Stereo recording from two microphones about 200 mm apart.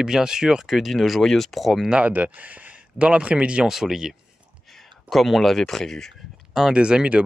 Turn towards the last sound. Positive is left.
turn(degrees=-5)  # may be behind; listen again after turning